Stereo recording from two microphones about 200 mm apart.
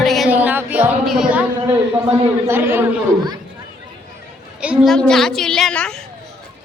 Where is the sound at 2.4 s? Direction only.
10° right (ahead or behind).